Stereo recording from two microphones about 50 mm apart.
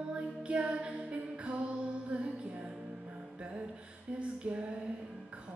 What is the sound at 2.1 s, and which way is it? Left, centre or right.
Music, right.